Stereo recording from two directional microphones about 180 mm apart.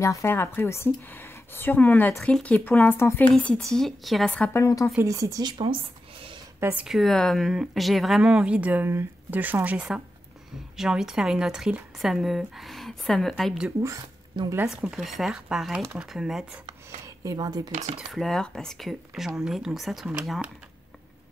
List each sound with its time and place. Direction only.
0.0 s speech: 15° left (ahead or behind)
4.6 s speech: 15° left (ahead or behind)
4.9 s speech: 15° right (ahead or behind)
6.6 s speech: 10° right (ahead or behind)
13.8 s speech: 20° right (ahead or behind)
14.7 s speech: 5° right (ahead or behind)
17.2 s speech: 20° right (ahead or behind)
17.6 s speech: 40° right (ahead or behind)
17.9 s speech: centre (ahead or behind)